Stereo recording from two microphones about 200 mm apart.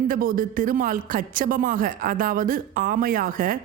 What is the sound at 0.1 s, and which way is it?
A woman's voice, 45° right (ahead or behind).